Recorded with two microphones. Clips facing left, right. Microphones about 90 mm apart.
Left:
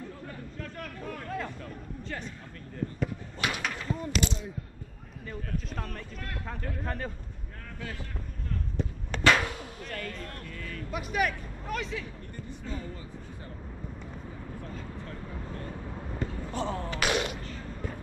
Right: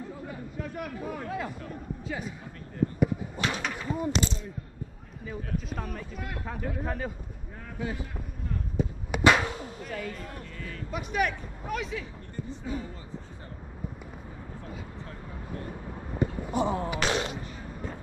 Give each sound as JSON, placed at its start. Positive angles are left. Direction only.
{"t": 0.2, "sound": "chatter", "side_deg": -10}
{"t": 2.0, "sound": "speech", "side_deg": -5}
{"t": 2.8, "sound": "a sound", "side_deg": -20}
{"t": 3.3, "sound": "bird", "side_deg": 10}
{"t": 3.7, "sound": "gunshot", "side_deg": -10}
{"t": 5.2, "sound": "speech", "side_deg": -5}
{"t": 7.8, "sound": "speech", "side_deg": -15}
{"t": 8.7, "sound": "a sound", "side_deg": -10}
{"t": 10.9, "sound": "speech", "side_deg": 0}
{"t": 16.2, "sound": "a sound", "side_deg": -15}